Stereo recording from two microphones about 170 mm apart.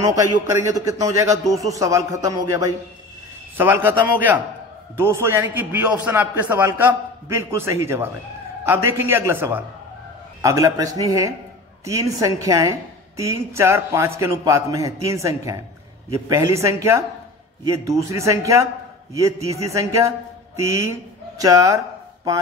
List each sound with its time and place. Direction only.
0.0 s a man's voice: 20° right (ahead or behind)